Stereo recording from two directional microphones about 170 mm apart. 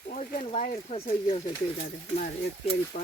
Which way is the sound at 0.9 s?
35° left (ahead or behind).